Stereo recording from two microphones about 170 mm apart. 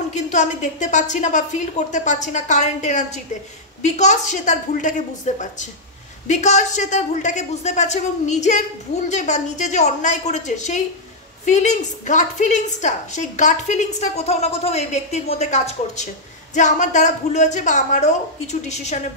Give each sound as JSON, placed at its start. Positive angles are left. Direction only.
{"t": 0.1, "sound": "a woman's voice", "side_deg": 45}